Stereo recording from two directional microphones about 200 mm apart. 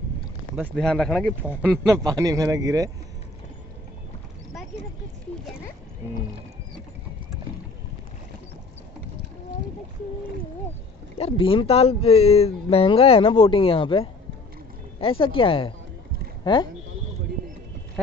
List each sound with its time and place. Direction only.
0.7 s speech: 5° left (ahead or behind)
1.6 s a man's voice: 10° right (ahead or behind)
11.1 s speech: 30° left (ahead or behind)